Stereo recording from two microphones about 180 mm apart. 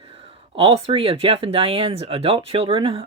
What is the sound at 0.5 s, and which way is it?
Speech, 30° right (ahead or behind).